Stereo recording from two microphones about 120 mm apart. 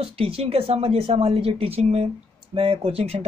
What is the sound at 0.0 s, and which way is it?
Speech, 55° right (ahead or behind).